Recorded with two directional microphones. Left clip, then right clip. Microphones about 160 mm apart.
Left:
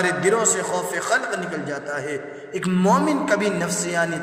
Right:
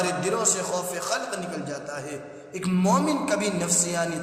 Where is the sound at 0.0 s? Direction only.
25° left (ahead or behind).